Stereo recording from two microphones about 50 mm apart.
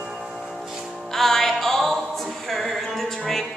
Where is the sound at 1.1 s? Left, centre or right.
Centre.